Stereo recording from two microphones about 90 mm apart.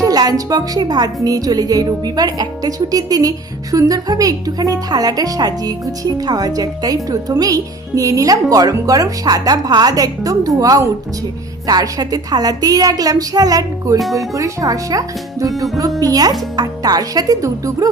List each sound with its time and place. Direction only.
0.0 s a woman's voice: 45° right (ahead or behind)